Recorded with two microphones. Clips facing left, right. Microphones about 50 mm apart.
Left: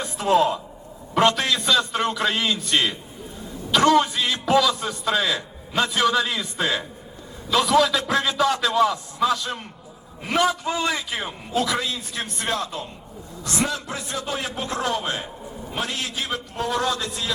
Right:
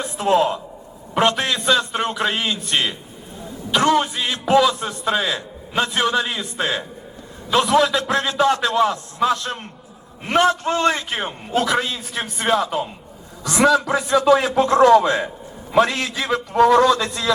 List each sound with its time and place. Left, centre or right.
0.0 s a man's voice: right
10.6 s a man's voice: right
11.5 s a man's voice: right
13.4 s a man's voice: right
13.7 s a man's voice: right
15.8 s a man's voice: right
16.9 s a man's voice: right